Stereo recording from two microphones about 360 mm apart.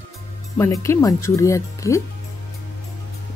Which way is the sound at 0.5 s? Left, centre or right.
Centre.